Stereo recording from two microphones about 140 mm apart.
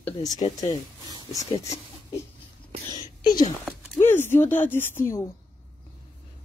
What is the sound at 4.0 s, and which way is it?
Speech, 15° left (ahead or behind).